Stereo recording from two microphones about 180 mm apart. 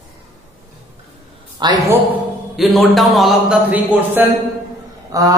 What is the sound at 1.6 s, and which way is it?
Speech, 25° right (ahead or behind).